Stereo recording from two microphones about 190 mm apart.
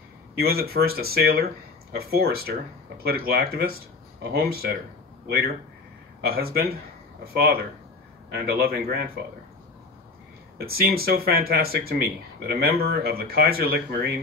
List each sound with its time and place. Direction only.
0.4 s speech: 55° right (ahead or behind)
6.2 s speech: 55° right (ahead or behind)
8.3 s a man's voice: 55° right (ahead or behind)
10.6 s speech: 55° right (ahead or behind)